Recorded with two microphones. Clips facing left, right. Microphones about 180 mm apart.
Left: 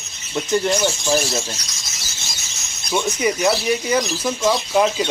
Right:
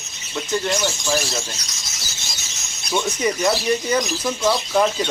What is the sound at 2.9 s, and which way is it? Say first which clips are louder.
Speech: left 1 dB; 10° left (ahead or behind).